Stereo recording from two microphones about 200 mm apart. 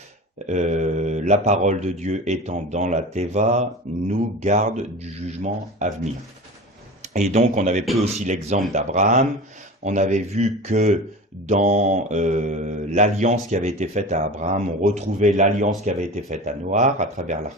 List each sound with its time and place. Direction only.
0.4 s mantra: 35° right (ahead or behind)
7.0 s speech: 35° right (ahead or behind)
7.9 s mantra: 35° right (ahead or behind)